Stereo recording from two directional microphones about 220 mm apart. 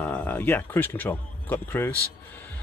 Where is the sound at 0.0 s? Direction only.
5° left (ahead or behind).